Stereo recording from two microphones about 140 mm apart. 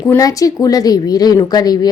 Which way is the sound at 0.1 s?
25° left (ahead or behind).